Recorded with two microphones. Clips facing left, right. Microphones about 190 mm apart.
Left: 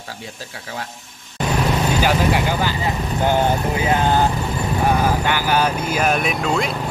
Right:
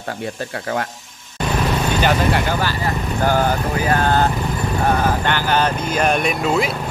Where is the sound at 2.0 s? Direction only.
10° left (ahead or behind).